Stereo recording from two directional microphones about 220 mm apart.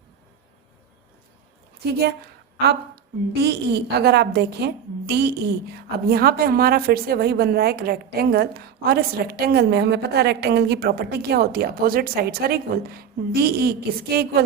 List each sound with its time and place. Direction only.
1.9 s a woman's voice: 45° right (ahead or behind)
3.4 s a woman's voice: 45° right (ahead or behind)